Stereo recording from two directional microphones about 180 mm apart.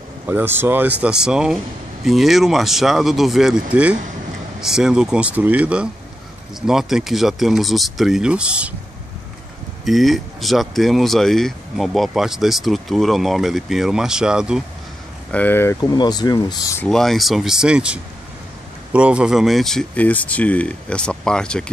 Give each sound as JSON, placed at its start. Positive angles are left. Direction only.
{"t": 0.3, "sound": "speech", "side_deg": -10}
{"t": 9.8, "sound": "speech", "side_deg": 0}
{"t": 15.3, "sound": "speech", "side_deg": 10}
{"t": 16.8, "sound": "speech", "side_deg": 0}